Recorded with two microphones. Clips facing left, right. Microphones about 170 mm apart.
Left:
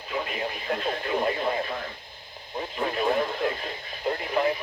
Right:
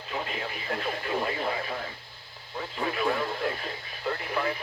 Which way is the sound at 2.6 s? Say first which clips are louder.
Left 2 dB; 15° left (ahead or behind).